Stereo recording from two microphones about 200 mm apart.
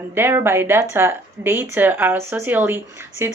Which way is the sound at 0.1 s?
10° right (ahead or behind).